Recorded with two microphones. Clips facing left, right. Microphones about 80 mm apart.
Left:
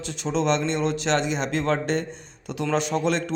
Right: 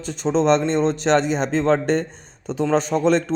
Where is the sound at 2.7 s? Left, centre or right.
Right.